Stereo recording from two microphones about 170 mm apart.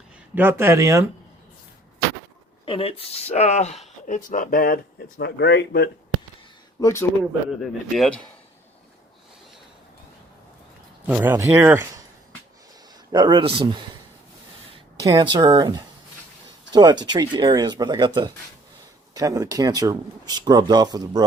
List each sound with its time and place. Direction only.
0.3 s speech: 15° right (ahead or behind)
2.6 s speech: 35° left (ahead or behind)
4.0 s speech: 50° left (ahead or behind); by 5.9 s 80° left
6.7 s speech: 15° left (ahead or behind)
7.6 s speech: centre (ahead or behind)
11.0 s speech: 10° right (ahead or behind)
13.1 s speech: 25° right (ahead or behind)
15.1 s speech: 25° right (ahead or behind)